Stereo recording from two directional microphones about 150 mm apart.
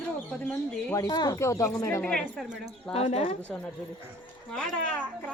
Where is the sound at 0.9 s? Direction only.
25° left (ahead or behind); by 2.4 s 5° left (ahead or behind).